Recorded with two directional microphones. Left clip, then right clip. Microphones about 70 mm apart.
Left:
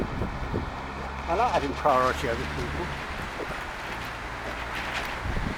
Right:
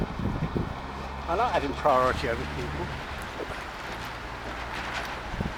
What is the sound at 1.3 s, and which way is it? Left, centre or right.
Speech, right.